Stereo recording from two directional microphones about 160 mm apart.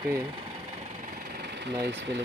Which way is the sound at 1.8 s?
90° right.